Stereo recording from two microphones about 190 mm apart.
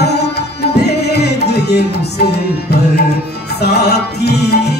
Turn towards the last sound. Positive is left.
turn(degrees=60)  # may be behind; listen again after turning